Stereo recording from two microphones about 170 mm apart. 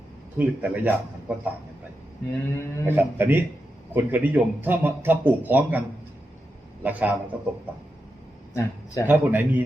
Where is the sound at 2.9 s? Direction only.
10° right (ahead or behind).